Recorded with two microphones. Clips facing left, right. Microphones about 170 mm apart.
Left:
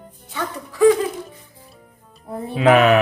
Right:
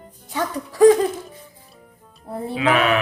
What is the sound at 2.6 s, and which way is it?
Speech, 40° left (ahead or behind).